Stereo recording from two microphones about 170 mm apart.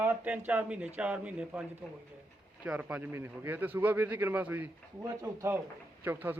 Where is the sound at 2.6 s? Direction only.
10° right (ahead or behind).